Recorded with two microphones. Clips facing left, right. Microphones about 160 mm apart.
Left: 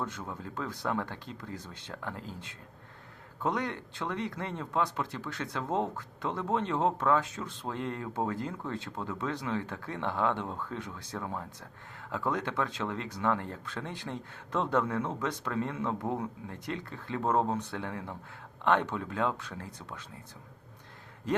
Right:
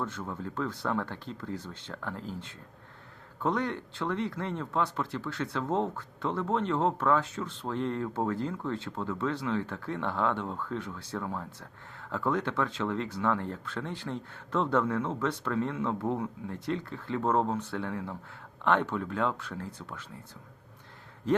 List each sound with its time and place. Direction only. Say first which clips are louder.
0.0 s speech: right 2 dB; 15° left (ahead or behind)